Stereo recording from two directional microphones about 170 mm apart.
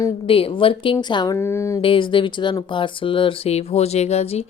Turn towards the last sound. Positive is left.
turn(degrees=35)  # may be behind; listen again after turning